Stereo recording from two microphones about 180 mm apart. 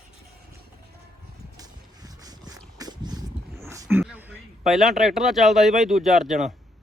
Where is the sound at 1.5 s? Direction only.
20° right (ahead or behind).